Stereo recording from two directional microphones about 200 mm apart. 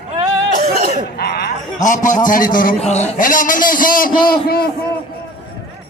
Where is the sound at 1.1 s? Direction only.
50° left (ahead or behind).